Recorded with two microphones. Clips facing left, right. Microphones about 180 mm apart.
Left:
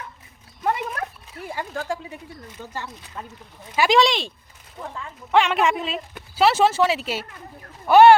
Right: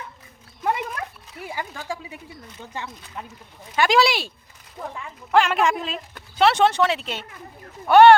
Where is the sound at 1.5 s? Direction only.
5° right (ahead or behind).